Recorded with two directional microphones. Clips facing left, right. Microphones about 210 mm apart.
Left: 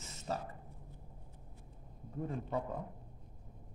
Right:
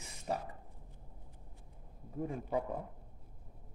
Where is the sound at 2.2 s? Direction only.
10° right (ahead or behind).